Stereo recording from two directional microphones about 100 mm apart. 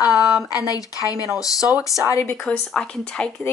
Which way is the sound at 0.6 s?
35° left (ahead or behind).